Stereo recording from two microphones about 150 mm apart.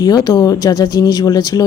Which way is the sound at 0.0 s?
25° left (ahead or behind).